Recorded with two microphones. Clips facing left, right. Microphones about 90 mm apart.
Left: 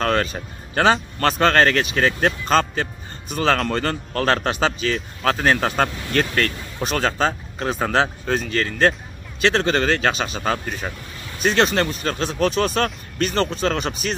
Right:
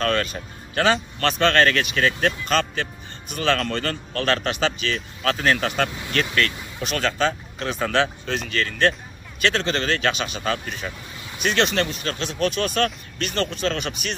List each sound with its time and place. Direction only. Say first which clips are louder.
0.0 s speech: left 2 dB; 35° left (ahead or behind)